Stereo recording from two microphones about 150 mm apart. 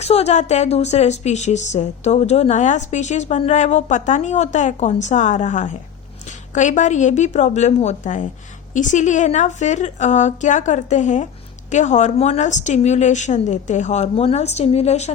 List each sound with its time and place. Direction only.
0.0 s a woman's voice: 45° left (ahead or behind)